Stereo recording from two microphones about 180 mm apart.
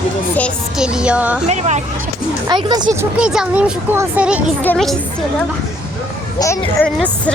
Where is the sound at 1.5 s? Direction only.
40° right (ahead or behind).